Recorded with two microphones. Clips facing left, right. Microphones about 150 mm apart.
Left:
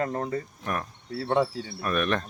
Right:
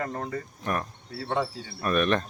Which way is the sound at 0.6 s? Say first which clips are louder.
Right 1 dB; centre (ahead or behind).